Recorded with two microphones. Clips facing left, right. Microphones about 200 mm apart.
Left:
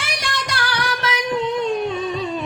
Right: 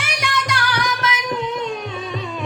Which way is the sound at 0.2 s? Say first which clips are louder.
Right 5 dB; 30° left (ahead or behind).